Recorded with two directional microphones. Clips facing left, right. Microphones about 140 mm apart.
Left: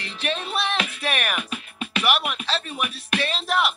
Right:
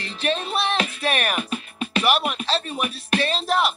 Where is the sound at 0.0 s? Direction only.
35° right (ahead or behind).